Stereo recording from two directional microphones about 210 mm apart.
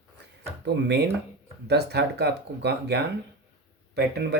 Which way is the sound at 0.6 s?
50° right (ahead or behind).